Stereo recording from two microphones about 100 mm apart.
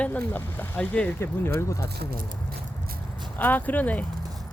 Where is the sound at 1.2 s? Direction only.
30° left (ahead or behind).